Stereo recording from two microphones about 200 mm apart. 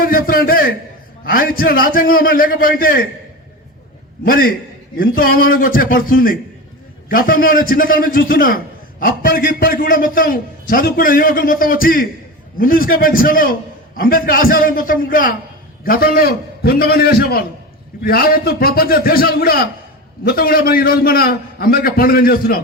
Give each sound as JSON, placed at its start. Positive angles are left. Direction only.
{"t": 0.0, "sound": "a man's voice", "side_deg": 45}
{"t": 4.3, "sound": "a man's voice", "side_deg": 45}